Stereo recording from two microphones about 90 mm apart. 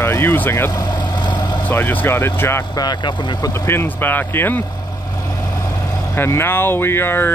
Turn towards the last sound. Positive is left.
turn(degrees=25)  # may be behind; listen again after turning